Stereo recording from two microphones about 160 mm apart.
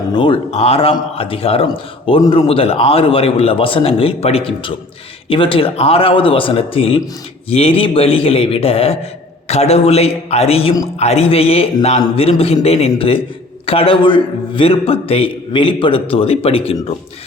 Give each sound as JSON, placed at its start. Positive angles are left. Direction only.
{"t": 0.1, "sound": "a man's voice", "side_deg": 35}